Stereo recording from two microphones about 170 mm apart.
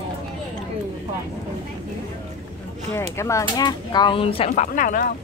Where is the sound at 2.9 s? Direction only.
15° left (ahead or behind); by 5.1 s 55° left (ahead or behind).